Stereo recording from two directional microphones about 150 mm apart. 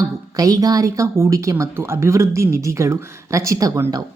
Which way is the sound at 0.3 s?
25° right (ahead or behind).